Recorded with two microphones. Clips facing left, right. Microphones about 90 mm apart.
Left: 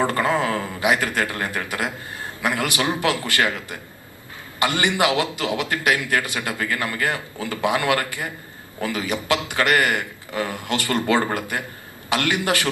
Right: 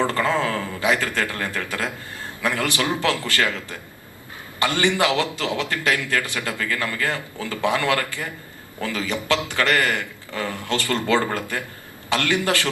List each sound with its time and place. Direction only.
0.0 s a man's voice: 20° left (ahead or behind)